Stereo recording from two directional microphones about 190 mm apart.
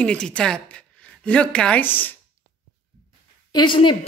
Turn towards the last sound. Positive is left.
turn(degrees=25)  # may be behind; listen again after turning